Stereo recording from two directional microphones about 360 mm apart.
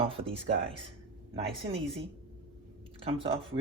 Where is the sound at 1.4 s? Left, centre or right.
Centre.